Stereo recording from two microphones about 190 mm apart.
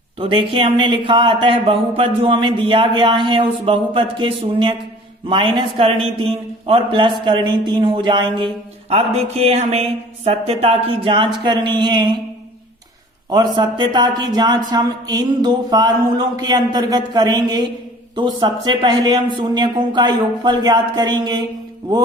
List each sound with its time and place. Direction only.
0.2 s a man's voice: 30° right (ahead or behind)
13.3 s a man's voice: 20° right (ahead or behind)